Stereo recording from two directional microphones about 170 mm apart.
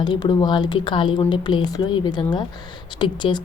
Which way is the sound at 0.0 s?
25° left (ahead or behind).